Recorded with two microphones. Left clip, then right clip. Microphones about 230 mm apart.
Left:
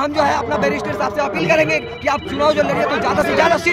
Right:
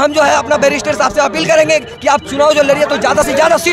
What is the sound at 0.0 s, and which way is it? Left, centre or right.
A man's voice, right.